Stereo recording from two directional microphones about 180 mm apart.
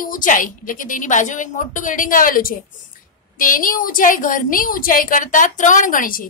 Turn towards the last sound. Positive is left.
turn(degrees=50)  # may be behind; listen again after turning